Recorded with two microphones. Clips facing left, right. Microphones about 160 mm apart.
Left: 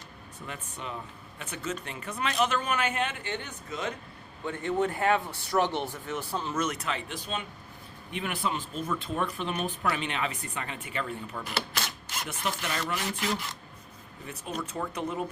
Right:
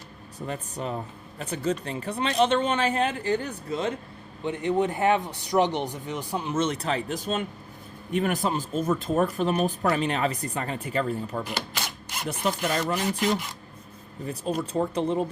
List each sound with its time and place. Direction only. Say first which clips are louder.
0.3 s speech: right 8 dB; 35° right (ahead or behind)
4.4 s speech: right 4 dB; 20° right (ahead or behind)
6.6 s speech: right 7 dB; 30° right (ahead or behind)
14.3 s speech: right 7 dB; 35° right (ahead or behind)